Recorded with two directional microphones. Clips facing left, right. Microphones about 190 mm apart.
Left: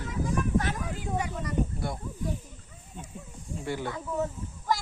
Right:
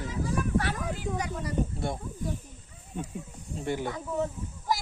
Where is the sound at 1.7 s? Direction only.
25° right (ahead or behind).